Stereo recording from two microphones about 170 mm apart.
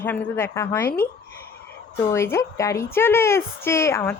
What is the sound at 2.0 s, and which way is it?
Speech, 15° left (ahead or behind).